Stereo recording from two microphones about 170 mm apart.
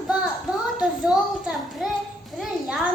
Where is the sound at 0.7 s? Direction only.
5° right (ahead or behind).